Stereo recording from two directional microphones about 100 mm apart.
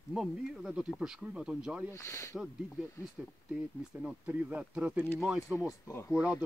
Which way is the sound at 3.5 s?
10° right (ahead or behind).